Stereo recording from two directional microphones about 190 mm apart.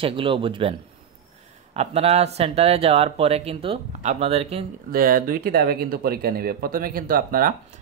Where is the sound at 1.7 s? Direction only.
35° right (ahead or behind).